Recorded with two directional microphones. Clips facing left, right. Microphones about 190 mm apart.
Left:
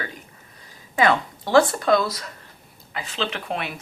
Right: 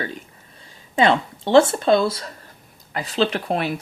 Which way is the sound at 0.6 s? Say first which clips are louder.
Right 2 dB; 25° right (ahead or behind).